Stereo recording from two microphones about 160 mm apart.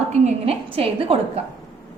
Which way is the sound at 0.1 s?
40° right (ahead or behind).